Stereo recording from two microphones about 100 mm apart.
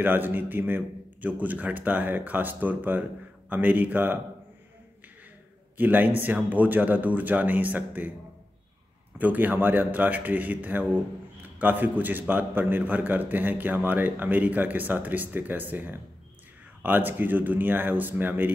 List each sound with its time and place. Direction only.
0.0 s a man's voice: 20° right (ahead or behind)
5.8 s a man's voice: 20° right (ahead or behind)
9.2 s a man's voice: 15° right (ahead or behind)